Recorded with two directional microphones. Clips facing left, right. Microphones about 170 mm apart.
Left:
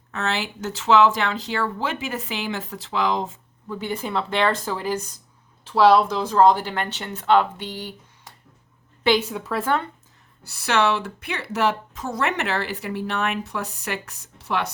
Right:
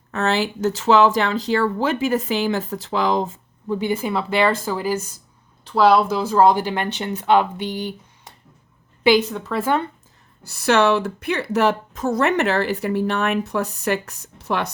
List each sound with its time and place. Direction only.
0.1 s speech: 40° right (ahead or behind)
3.8 s speech: 10° right (ahead or behind)
9.2 s a woman's voice: 10° left (ahead or behind)
10.4 s speech: 45° right (ahead or behind)